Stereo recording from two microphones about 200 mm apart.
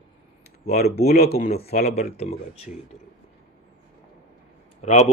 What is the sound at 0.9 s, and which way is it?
Speech, 35° left (ahead or behind).